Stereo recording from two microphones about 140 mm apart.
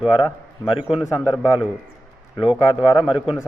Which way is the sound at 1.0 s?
15° left (ahead or behind).